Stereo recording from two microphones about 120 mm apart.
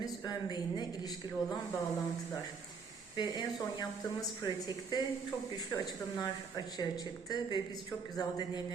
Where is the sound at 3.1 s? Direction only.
35° left (ahead or behind).